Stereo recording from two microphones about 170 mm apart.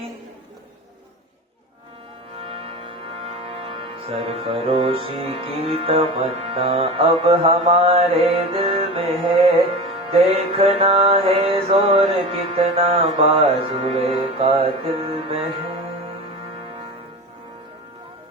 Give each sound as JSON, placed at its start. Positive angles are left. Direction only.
{"t": 2.4, "sound": "music", "side_deg": -35}